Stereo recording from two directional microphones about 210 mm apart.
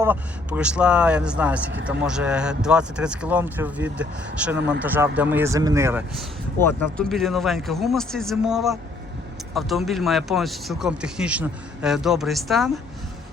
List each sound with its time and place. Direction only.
0.0 s speech: 10° right (ahead or behind)
4.5 s speech: 55° right (ahead or behind)
4.8 s speech: 10° right (ahead or behind)
6.6 s speech: 10° left (ahead or behind)
7.1 s speech: centre (ahead or behind)